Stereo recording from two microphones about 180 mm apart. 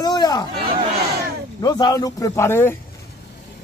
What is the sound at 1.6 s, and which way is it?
Speech, 20° left (ahead or behind).